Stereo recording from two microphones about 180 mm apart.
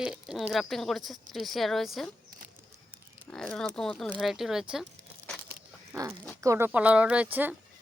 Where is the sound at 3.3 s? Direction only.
5° left (ahead or behind).